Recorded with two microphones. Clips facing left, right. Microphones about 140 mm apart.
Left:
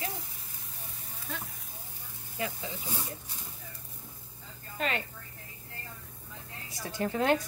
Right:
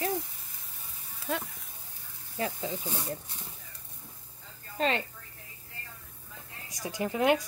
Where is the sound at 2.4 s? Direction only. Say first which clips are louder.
Right 2 dB; 35° right (ahead or behind).